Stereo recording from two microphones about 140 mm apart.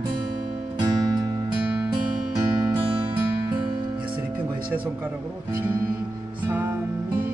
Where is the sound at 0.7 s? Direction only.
30° right (ahead or behind).